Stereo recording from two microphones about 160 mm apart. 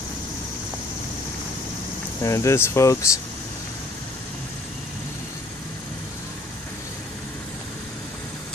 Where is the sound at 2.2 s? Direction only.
20° left (ahead or behind).